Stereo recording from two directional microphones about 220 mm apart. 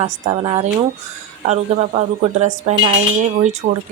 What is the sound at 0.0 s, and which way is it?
Speech, 25° right (ahead or behind).